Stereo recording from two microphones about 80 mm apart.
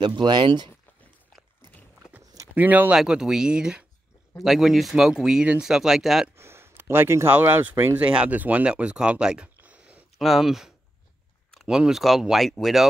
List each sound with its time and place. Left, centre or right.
0.0 s speech: right
2.5 s speech: right
2.9 s speech: centre
6.3 s speech: right; by 9.5 s centre
9.6 s a sound: centre
10.1 s speech: centre